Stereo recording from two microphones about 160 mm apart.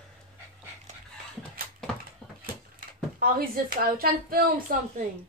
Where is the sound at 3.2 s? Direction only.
65° right (ahead or behind).